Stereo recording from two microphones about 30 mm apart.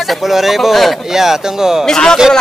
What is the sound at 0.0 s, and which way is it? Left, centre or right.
Speech, centre.